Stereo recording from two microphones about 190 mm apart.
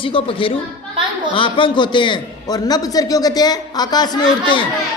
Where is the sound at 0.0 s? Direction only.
30° left (ahead or behind).